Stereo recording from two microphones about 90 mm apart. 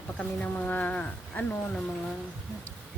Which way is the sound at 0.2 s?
15° left (ahead or behind).